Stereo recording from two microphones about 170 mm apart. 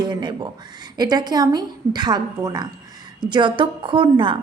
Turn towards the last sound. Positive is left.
turn(degrees=-30)  # may be behind; listen again after turning